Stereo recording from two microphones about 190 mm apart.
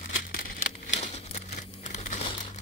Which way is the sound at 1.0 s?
35° left (ahead or behind).